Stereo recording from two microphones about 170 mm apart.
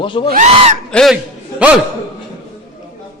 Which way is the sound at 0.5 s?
35° right (ahead or behind).